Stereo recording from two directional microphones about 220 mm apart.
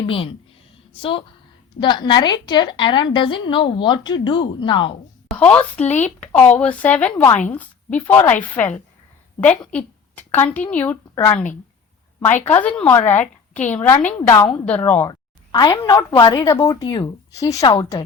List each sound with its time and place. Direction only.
0.0 s a woman's voice: 25° left (ahead or behind)
5.3 s a woman's voice: 5° left (ahead or behind)
9.4 s a woman's voice: 5° left (ahead or behind)
12.5 s a woman's voice: 5° left (ahead or behind)